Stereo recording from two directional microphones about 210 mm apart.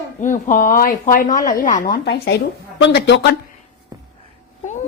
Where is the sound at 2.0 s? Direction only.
50° left (ahead or behind).